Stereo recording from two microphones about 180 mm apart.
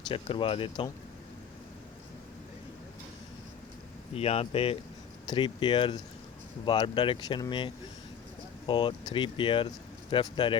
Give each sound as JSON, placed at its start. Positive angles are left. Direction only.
{"t": 0.1, "sound": "speech", "side_deg": 30}
{"t": 4.1, "sound": "speech", "side_deg": 35}